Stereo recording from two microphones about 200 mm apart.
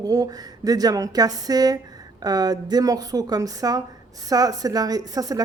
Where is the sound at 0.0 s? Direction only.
20° right (ahead or behind).